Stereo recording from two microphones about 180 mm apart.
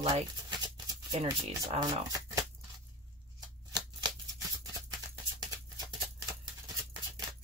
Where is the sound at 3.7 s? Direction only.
20° right (ahead or behind).